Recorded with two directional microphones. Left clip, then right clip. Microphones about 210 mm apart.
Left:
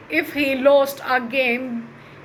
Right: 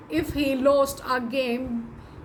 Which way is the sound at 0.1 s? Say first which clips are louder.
Left 5 dB; 25° right (ahead or behind).